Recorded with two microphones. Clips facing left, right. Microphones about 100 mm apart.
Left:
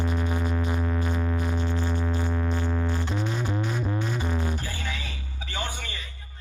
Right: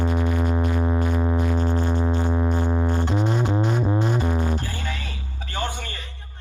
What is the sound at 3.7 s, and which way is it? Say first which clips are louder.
Music: right 6 dB; 30° right (ahead or behind).